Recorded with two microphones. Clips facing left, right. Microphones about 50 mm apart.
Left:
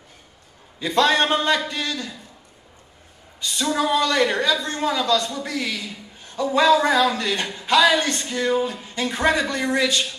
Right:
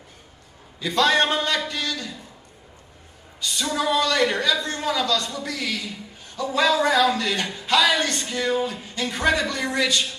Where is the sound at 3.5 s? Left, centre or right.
Left.